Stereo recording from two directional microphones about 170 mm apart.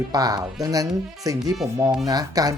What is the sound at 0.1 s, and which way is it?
Speech, 20° right (ahead or behind).